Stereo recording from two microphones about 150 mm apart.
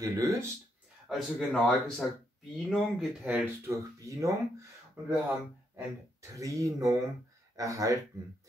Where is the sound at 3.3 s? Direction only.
20° right (ahead or behind).